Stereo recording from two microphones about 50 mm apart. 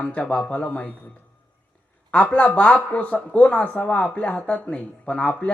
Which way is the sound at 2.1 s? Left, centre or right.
Left.